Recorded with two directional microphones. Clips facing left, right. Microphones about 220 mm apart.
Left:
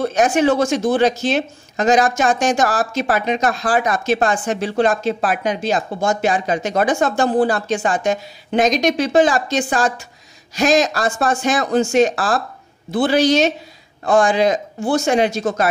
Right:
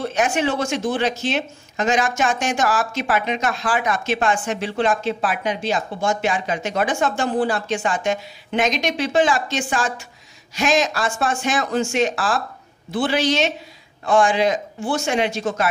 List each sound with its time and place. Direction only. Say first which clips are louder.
0.0 s speech: left 5 dB; 40° left (ahead or behind)